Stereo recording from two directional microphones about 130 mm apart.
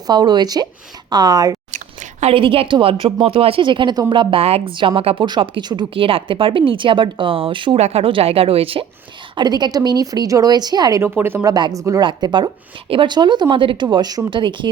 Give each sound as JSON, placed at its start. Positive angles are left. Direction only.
{"t": 0.1, "sound": "speech", "side_deg": -35}
{"t": 2.2, "sound": "a woman's voice", "side_deg": -45}
{"t": 7.8, "sound": "a woman's voice", "side_deg": -55}
{"t": 9.3, "sound": "speech", "side_deg": -35}
{"t": 11.0, "sound": "speech", "side_deg": -15}
{"t": 11.5, "sound": "speech", "side_deg": -30}
{"t": 12.0, "sound": "speech", "side_deg": -35}